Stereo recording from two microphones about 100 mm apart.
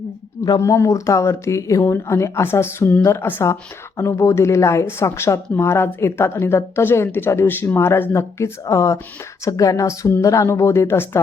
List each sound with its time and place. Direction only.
0.6 s speech: 30° left (ahead or behind)